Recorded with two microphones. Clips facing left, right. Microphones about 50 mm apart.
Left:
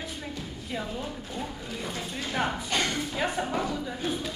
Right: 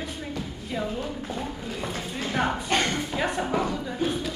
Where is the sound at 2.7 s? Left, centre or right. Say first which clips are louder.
Right 5 dB; right.